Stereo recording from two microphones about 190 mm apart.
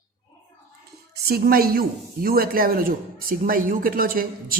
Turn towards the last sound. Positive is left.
turn(degrees=-50)  # may be behind; listen again after turning